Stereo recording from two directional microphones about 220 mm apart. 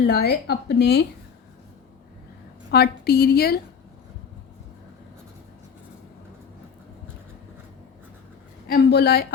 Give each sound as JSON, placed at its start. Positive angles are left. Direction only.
{"t": 0.1, "sound": "a woman's voice", "side_deg": 45}
{"t": 2.6, "sound": "a woman's voice", "side_deg": 45}
{"t": 8.6, "sound": "a woman's voice", "side_deg": 45}